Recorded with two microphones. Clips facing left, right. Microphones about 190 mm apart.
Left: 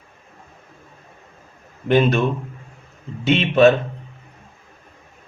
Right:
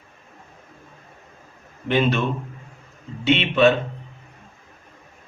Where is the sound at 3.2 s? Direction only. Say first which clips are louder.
Left 3 dB; 40° left (ahead or behind).